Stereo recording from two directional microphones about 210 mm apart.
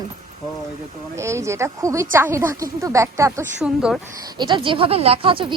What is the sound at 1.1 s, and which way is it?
A woman's voice, 15° right (ahead or behind).